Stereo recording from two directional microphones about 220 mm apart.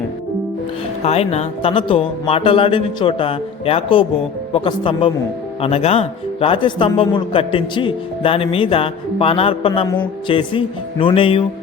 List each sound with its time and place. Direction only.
1.0 s speech: 30° left (ahead or behind)